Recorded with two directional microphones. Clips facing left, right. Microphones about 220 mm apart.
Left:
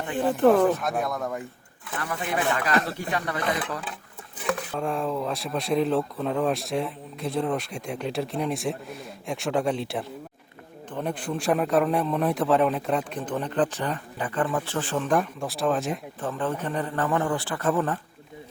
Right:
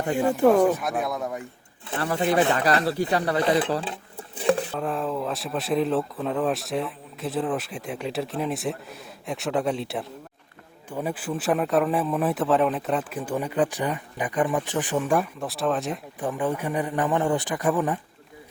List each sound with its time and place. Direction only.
0.2 s a man's voice: 10° right (ahead or behind)
1.9 s speech: 30° right (ahead or behind)
4.4 s a sound: 30° right (ahead or behind)
4.7 s speech: centre (ahead or behind)
16.2 s a man's voice: 15° right (ahead or behind)